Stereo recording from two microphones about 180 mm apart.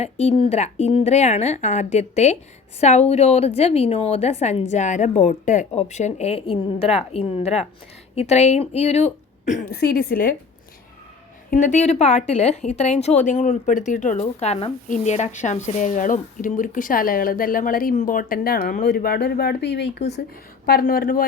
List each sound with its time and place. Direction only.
0.0 s speech: 35° left (ahead or behind)
9.6 s a woman's voice: 60° left (ahead or behind)
11.5 s speech: 45° left (ahead or behind); by 20.2 s 65° left (ahead or behind)
20.7 s a woman's voice: 55° left (ahead or behind)